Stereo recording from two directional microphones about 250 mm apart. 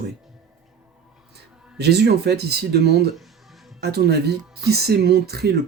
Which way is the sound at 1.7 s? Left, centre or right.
Right.